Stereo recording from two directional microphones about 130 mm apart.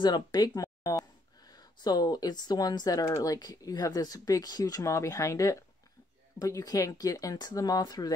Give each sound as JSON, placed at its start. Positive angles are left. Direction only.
{"t": 0.0, "sound": "speech", "side_deg": 35}